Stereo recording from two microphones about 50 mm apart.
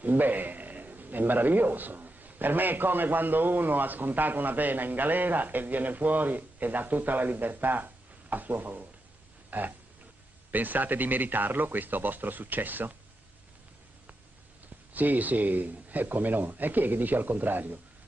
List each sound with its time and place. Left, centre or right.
0.0 s a man's voice: right
9.5 s a sound: right
10.5 s a man's voice: right
15.0 s a man's voice: right